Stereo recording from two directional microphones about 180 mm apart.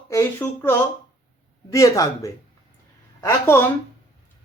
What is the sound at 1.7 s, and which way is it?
Speech, 20° left (ahead or behind).